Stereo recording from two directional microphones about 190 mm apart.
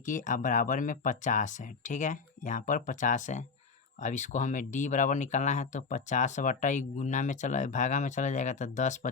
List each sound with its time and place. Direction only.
0.0 s speech: 40° left (ahead or behind)